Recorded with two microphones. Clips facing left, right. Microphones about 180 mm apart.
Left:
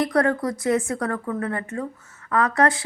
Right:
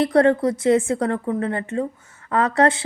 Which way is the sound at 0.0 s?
25° right (ahead or behind).